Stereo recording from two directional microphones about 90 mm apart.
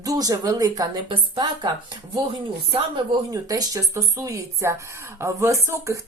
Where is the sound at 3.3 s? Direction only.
40° right (ahead or behind).